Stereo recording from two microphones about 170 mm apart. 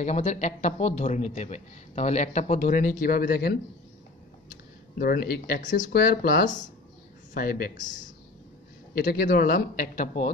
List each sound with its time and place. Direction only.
0.0 s speech: 40° left (ahead or behind); by 3.5 s 70° left (ahead or behind)
4.9 s speech: 60° left (ahead or behind)
8.9 s speech: 70° left (ahead or behind); by 10.3 s 45° left (ahead or behind)